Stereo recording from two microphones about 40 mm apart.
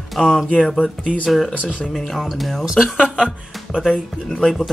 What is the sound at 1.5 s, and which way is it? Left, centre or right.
Speech, left.